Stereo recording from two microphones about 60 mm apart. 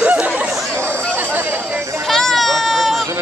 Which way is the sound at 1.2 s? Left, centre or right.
Right.